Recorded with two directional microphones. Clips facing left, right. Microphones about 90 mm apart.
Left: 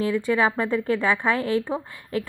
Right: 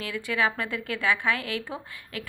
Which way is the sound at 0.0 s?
35° left (ahead or behind).